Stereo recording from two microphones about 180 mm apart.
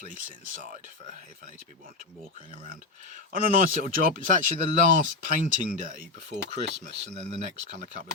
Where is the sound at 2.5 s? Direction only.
50° right (ahead or behind).